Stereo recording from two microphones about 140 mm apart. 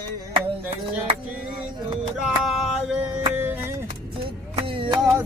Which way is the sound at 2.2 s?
Centre (ahead or behind).